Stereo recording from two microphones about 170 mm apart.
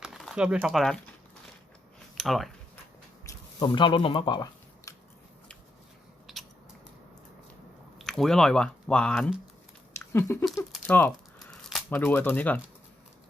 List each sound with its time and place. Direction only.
0.0 s speech: centre (ahead or behind)
2.1 s speech: centre (ahead or behind)
3.2 s speech: 25° left (ahead or behind)
6.3 s a sound: centre (ahead or behind)
7.9 s speech: centre (ahead or behind)
10.0 s a sound: 15° left (ahead or behind)
11.9 s speech: 10° left (ahead or behind)